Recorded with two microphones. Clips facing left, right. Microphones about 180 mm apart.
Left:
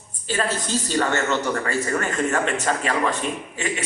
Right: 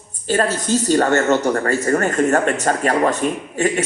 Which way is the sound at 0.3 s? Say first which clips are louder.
Right 7 dB; 45° right (ahead or behind).